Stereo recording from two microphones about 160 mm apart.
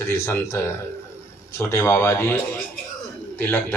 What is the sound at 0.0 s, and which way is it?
A man's voice, 15° left (ahead or behind).